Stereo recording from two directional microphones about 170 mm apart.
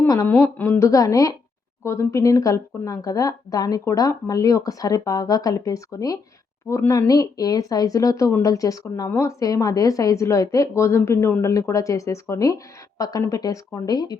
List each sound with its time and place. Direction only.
0.0 s a woman's voice: 15° left (ahead or behind)